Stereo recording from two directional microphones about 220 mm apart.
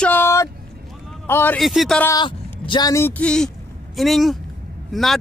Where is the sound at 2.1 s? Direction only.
20° left (ahead or behind); by 5.2 s centre (ahead or behind).